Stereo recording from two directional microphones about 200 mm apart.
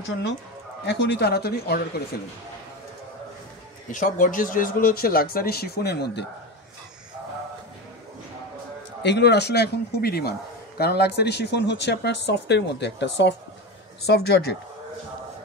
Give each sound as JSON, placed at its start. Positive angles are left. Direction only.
{"t": 0.8, "sound": "speech", "side_deg": 55}
{"t": 3.9, "sound": "speech", "side_deg": 40}
{"t": 9.0, "sound": "speech", "side_deg": 55}